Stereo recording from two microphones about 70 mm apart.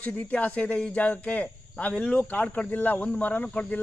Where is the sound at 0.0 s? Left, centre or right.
Left.